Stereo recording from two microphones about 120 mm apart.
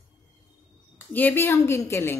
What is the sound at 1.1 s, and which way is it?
A woman's voice, 15° left (ahead or behind).